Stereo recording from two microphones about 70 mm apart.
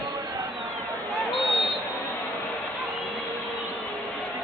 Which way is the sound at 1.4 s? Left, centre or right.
Centre.